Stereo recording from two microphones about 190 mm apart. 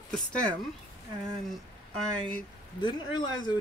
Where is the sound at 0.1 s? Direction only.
5° left (ahead or behind).